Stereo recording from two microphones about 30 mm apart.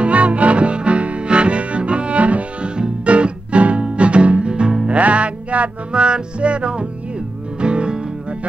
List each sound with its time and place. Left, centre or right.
0.0 s music: right
4.8 s music: right
5.9 s music: right